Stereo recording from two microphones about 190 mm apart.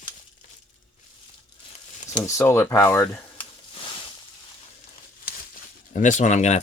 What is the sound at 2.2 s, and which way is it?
Speech, 15° left (ahead or behind).